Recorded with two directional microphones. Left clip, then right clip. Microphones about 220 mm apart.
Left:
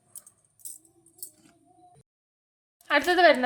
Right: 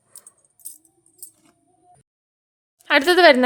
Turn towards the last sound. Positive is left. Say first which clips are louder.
# right 7 dB
turn(degrees=-50)  # may be behind; listen again after turning